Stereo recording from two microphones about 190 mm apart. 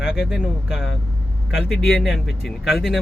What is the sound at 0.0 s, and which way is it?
Speech, 5° right (ahead or behind).